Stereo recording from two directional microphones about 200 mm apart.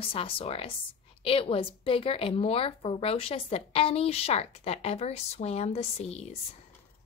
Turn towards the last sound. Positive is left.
turn(degrees=30)  # may be behind; listen again after turning